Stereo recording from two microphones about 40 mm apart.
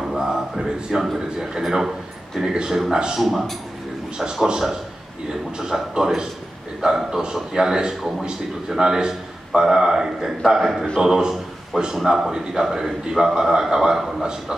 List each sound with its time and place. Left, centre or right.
0.1 s a sound: centre
0.8 s a man's voice: centre
3.2 s a man's voice: centre
4.2 s a man's voice: centre